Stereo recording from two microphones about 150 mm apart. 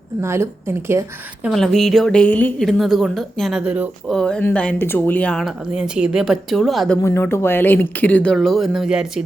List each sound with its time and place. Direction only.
0.2 s a woman's voice: 15° right (ahead or behind)
1.5 s speech: centre (ahead or behind)
4.2 s speech: 10° left (ahead or behind)
7.0 s speech: 15° left (ahead or behind); by 9.2 s 5° right (ahead or behind)